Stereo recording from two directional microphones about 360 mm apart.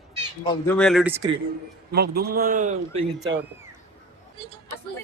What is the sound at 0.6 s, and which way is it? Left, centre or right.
Speech, centre.